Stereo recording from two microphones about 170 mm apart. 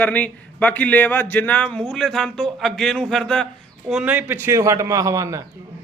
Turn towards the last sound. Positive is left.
turn(degrees=-20)  # may be behind; listen again after turning